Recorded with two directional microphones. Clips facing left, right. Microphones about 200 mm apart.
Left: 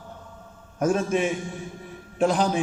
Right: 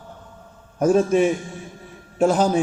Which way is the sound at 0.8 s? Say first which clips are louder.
Right 6 dB; 35° right (ahead or behind).